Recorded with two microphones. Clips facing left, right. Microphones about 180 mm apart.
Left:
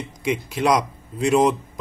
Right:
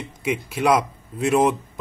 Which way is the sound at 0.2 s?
5° right (ahead or behind).